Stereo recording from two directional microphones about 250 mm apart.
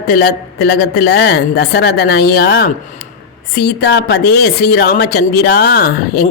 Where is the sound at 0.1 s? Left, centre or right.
Left.